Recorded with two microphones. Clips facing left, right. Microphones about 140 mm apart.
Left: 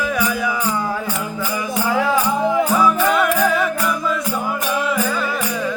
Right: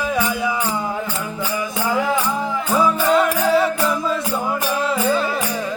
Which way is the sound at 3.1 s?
30° right (ahead or behind).